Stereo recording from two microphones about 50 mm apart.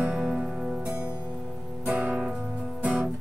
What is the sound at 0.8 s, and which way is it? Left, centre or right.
Music, right.